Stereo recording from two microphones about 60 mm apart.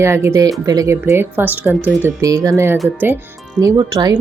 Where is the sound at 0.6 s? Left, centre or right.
Right.